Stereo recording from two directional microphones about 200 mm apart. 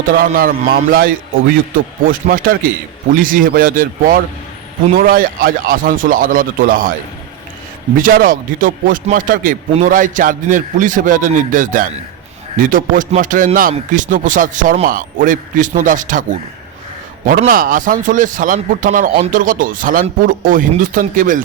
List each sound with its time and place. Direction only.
0.0 s a man's voice: 45° right (ahead or behind)
7.9 s a man's voice: 45° right (ahead or behind)
17.2 s a man's voice: 45° right (ahead or behind)